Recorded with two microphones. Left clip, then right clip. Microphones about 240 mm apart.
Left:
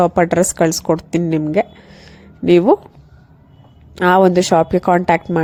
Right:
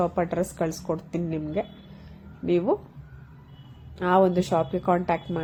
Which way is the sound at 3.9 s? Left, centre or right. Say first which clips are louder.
Left 10 dB; left.